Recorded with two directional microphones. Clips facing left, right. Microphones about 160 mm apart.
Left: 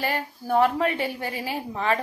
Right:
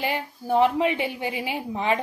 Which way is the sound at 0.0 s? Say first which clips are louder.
Even; 15° right (ahead or behind).